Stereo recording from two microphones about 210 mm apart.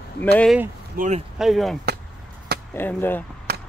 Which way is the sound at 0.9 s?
40° right (ahead or behind).